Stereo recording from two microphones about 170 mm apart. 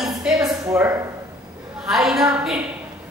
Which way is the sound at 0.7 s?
10° right (ahead or behind).